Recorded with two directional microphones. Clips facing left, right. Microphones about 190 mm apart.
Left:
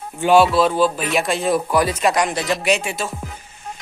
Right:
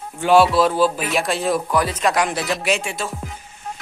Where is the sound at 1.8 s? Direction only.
10° left (ahead or behind).